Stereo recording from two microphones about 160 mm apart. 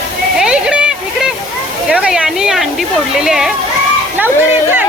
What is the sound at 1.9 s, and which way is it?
Speech, 5° right (ahead or behind).